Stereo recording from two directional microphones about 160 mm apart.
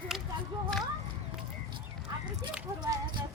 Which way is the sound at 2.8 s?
25° right (ahead or behind).